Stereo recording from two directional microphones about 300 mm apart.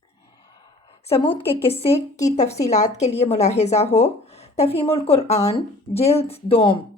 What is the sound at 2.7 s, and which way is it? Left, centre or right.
Speech, left.